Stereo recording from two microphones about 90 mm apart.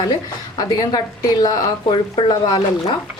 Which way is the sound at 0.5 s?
50° left (ahead or behind).